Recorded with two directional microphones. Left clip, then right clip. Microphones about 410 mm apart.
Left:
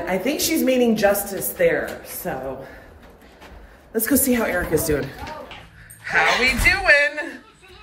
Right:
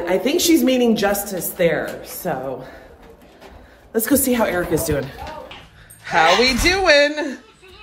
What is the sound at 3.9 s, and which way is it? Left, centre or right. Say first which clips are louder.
A woman's voice: right 2 dB; centre.